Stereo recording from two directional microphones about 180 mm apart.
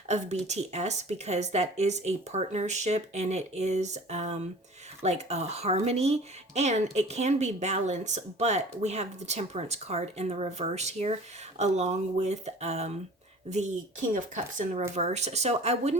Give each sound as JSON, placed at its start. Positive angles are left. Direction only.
{"t": 0.1, "sound": "speech", "side_deg": -40}
{"t": 14.1, "sound": "speech", "side_deg": -45}